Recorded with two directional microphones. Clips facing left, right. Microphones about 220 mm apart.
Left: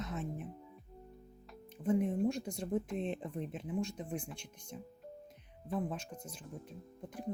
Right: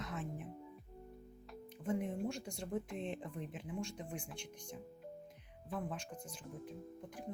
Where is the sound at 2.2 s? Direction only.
20° left (ahead or behind).